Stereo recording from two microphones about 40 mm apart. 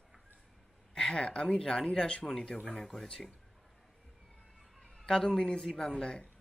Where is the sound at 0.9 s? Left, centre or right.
Left.